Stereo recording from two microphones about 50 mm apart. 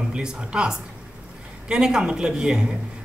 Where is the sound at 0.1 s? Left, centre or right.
Centre.